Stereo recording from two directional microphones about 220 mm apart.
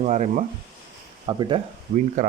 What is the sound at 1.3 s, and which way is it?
Speech, 20° right (ahead or behind).